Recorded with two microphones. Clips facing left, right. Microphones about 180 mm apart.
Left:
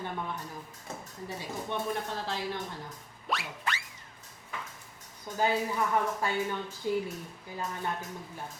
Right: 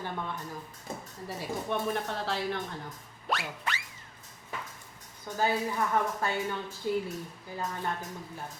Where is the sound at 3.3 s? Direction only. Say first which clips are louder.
Right 2 dB; centre (ahead or behind).